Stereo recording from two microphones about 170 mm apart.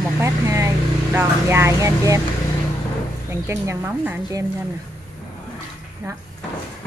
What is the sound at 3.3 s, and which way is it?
Speech, 15° right (ahead or behind).